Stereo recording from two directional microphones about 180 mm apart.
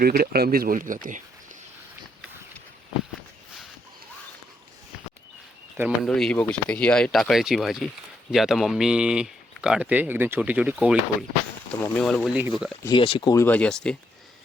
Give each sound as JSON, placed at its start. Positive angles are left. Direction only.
{"t": 0.0, "sound": "speech", "side_deg": -55}
{"t": 6.0, "sound": "speech", "side_deg": 5}
{"t": 11.8, "sound": "speech", "side_deg": 5}
{"t": 12.8, "sound": "speech", "side_deg": 30}